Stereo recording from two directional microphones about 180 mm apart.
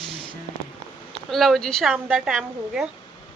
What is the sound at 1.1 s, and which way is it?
A woman's voice, centre (ahead or behind).